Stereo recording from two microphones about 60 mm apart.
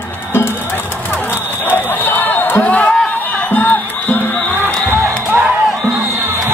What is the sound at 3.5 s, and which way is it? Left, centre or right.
Music, left.